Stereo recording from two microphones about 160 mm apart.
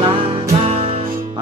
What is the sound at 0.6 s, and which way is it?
Music, 35° right (ahead or behind).